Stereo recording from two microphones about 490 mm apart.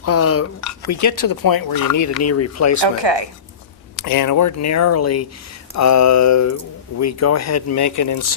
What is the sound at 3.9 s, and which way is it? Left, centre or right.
Speech, left.